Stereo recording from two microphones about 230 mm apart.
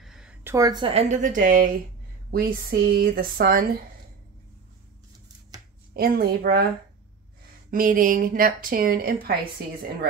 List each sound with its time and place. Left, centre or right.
0.0 s a woman's voice: centre; by 3.8 s right
5.9 s a woman's voice: right
7.7 s a woman's voice: right